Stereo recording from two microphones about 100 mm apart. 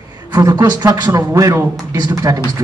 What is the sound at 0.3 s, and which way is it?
Speech, 40° right (ahead or behind).